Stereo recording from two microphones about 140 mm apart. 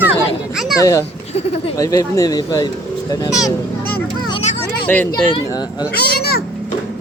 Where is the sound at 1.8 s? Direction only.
25° left (ahead or behind).